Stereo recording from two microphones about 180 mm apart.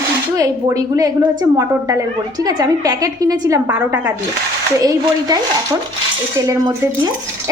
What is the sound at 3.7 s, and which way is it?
A woman's voice, 10° right (ahead or behind).